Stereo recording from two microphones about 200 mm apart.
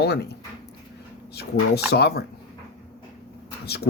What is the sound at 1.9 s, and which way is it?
Speech, 55° left (ahead or behind).